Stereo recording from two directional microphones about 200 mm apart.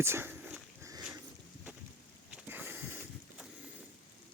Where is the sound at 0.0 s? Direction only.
10° right (ahead or behind).